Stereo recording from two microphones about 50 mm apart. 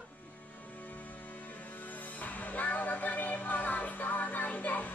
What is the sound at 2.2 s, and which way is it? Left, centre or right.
Music, left.